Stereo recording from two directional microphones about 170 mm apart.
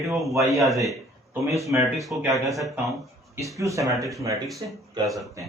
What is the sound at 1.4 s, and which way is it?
Speech, 20° right (ahead or behind).